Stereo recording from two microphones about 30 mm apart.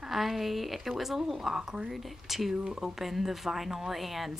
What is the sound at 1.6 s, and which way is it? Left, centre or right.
Speech, right.